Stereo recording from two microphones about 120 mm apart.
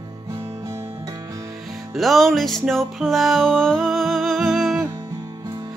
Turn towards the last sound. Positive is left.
turn(degrees=-5)  # may be behind; listen again after turning